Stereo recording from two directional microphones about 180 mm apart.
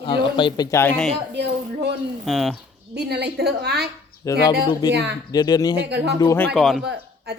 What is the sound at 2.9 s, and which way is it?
Speech, 65° right (ahead or behind).